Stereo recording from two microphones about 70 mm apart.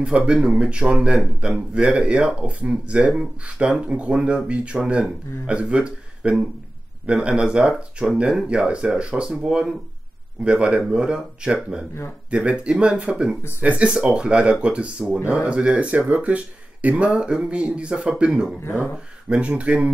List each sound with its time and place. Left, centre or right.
0.3 s a man's voice: centre
18.6 s speech: left
19.2 s speech: centre